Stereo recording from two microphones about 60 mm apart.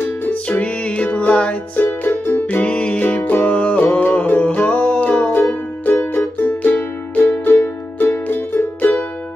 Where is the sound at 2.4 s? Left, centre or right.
Left.